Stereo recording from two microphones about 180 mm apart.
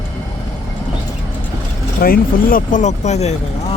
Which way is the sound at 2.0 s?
50° left (ahead or behind).